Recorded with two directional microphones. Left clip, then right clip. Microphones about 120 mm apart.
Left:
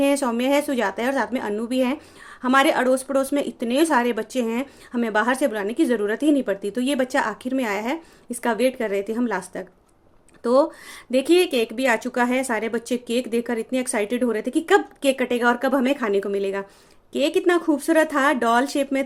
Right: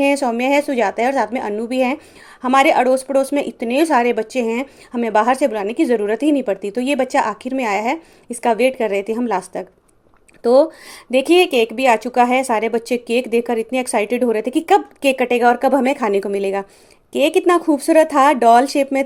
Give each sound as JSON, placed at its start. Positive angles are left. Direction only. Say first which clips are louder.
{"t": 0.0, "sound": "a woman's voice", "louder": "right 4 dB", "side_deg": -15}